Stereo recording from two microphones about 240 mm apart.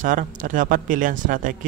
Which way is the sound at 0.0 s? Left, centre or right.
Right.